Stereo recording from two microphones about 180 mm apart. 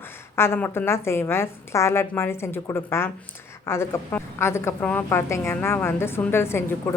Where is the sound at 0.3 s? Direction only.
15° left (ahead or behind).